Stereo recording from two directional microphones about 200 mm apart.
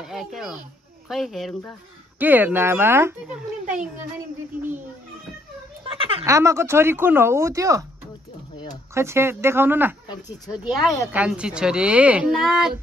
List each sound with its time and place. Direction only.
0.0 s a child's voice: centre (ahead or behind)
5.9 s speech: 30° right (ahead or behind)
6.2 s speech: 15° right (ahead or behind)
8.9 s speech: 15° right (ahead or behind)